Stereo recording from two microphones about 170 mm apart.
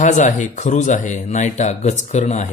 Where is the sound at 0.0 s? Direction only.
50° left (ahead or behind).